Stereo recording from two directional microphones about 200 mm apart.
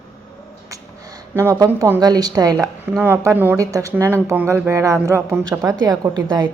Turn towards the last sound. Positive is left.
turn(degrees=-20)  # may be behind; listen again after turning